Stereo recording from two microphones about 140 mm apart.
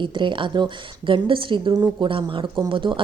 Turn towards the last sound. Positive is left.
turn(degrees=-35)  # may be behind; listen again after turning